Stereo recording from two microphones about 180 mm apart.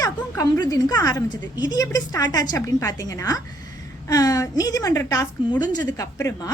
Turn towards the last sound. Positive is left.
turn(degrees=15)  # may be behind; listen again after turning